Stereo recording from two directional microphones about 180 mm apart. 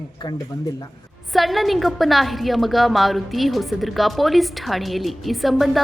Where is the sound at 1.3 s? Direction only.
Centre (ahead or behind).